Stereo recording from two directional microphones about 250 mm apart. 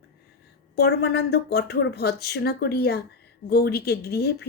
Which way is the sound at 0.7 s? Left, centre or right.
Left.